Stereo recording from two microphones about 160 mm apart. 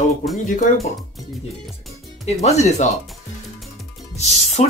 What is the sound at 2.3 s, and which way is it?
Speech, 45° left (ahead or behind).